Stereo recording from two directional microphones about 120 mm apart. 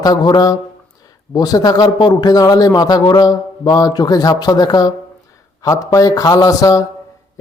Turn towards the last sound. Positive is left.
turn(degrees=30)  # may be behind; listen again after turning